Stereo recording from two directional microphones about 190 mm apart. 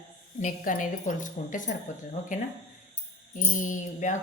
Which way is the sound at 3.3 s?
45° left (ahead or behind).